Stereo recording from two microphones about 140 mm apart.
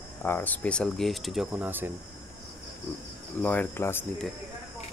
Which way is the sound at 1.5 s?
15° right (ahead or behind).